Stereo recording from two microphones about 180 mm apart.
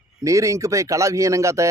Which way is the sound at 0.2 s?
15° right (ahead or behind).